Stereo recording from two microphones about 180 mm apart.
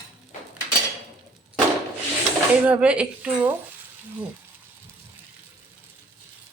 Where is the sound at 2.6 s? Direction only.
5° right (ahead or behind).